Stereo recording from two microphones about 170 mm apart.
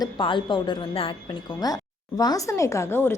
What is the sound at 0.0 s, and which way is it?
A woman's voice, 30° left (ahead or behind).